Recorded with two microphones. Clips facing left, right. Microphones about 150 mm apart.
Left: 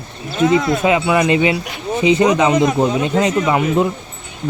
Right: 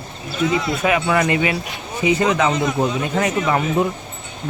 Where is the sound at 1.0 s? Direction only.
20° left (ahead or behind).